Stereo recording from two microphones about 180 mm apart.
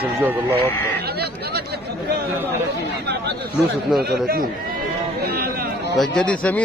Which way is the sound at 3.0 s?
65° right (ahead or behind).